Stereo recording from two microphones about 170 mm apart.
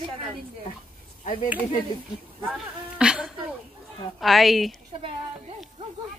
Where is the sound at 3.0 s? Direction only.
5° right (ahead or behind).